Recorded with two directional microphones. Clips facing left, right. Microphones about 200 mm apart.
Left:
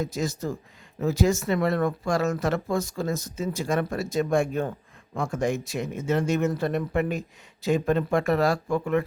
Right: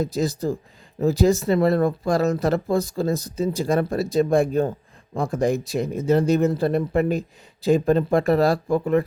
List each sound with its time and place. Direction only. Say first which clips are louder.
0.0 s speech: right 5 dB; 35° right (ahead or behind)